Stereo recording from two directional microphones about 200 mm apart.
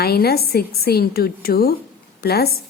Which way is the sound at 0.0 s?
50° left (ahead or behind).